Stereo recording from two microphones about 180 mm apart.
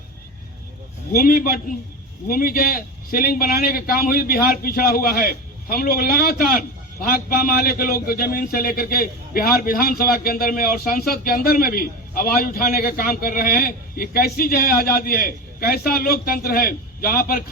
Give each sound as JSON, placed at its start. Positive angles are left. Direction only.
{"t": 1.1, "sound": "a man's voice", "side_deg": 55}